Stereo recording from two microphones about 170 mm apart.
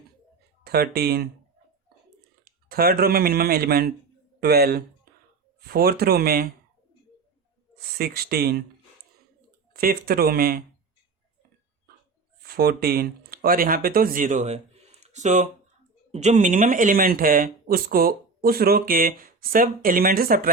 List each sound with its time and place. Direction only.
0.6 s speech: 65° right (ahead or behind)
2.4 s speech: 60° right (ahead or behind)
7.8 s speech: 65° right (ahead or behind)
9.7 s speech: 60° right (ahead or behind)
12.4 s speech: 65° right (ahead or behind)